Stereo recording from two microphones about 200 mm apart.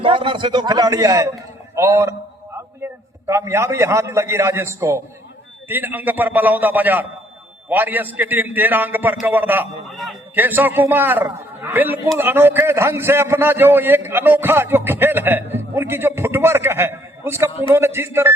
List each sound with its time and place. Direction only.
0.0 s a man's voice: 25° right (ahead or behind)
17.5 s a man's voice: 25° left (ahead or behind)
17.7 s a man's voice: 10° right (ahead or behind)